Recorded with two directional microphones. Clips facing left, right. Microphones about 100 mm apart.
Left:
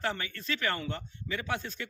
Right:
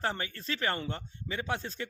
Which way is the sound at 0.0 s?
30° right (ahead or behind).